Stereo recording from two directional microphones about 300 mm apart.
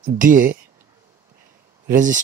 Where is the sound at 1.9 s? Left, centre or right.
Right.